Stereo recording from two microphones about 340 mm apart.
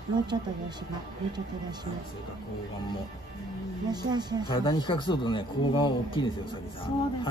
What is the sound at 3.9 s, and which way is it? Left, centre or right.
Speech, centre.